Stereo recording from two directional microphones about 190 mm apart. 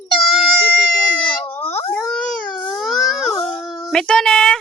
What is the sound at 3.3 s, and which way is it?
Child singing, 5° left (ahead or behind).